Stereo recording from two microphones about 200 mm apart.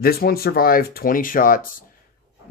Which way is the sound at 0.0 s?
50° left (ahead or behind).